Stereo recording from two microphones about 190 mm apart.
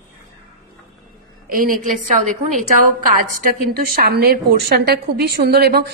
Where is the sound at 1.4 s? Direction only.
50° right (ahead or behind).